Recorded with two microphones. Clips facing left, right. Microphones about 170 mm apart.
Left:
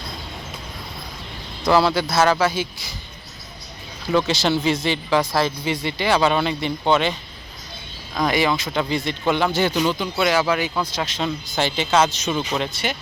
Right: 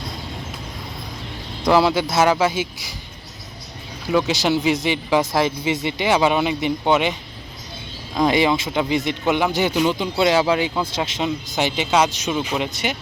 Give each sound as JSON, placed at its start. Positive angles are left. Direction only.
{"t": 1.6, "sound": "speech", "side_deg": -15}
{"t": 4.0, "sound": "speech", "side_deg": -10}